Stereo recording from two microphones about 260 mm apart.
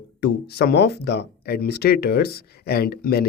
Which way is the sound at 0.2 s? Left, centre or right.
Left.